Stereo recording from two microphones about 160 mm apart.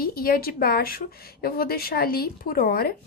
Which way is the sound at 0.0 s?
70° left (ahead or behind).